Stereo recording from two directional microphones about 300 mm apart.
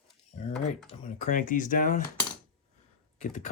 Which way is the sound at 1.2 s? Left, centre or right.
Left.